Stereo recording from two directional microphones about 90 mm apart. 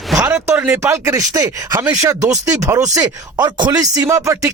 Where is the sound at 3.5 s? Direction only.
55° right (ahead or behind); by 4.5 s 35° right (ahead or behind).